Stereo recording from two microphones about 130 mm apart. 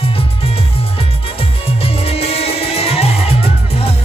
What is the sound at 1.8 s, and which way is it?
Music, 50° left (ahead or behind).